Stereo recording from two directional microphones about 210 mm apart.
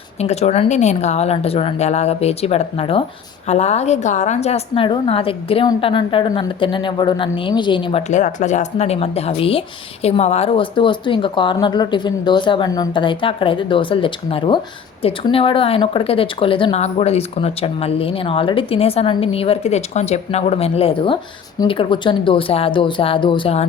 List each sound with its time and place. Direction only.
0.2 s speech: 30° left (ahead or behind)
8.1 s speech: 35° left (ahead or behind)